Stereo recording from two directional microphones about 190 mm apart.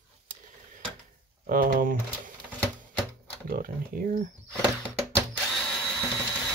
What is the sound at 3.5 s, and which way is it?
Speech, 50° right (ahead or behind).